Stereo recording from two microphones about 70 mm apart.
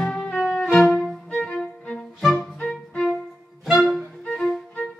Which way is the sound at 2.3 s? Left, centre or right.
Centre.